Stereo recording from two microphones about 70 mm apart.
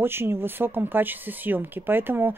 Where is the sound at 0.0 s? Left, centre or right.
Right.